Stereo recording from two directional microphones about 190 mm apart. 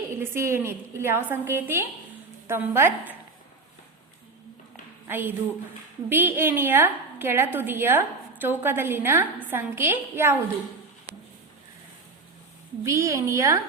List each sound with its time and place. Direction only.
0.1 s a woman's voice: 15° right (ahead or behind)
5.0 s a woman's voice: 10° right (ahead or behind)
12.8 s a woman's voice: 15° right (ahead or behind)